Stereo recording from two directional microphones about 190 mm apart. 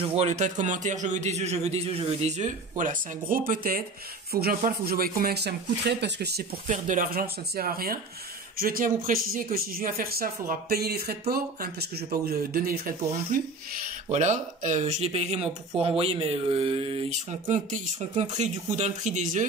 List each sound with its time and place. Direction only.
0.1 s speech: 35° right (ahead or behind); by 6.4 s 60° right (ahead or behind)
6.7 s speech: 45° right (ahead or behind)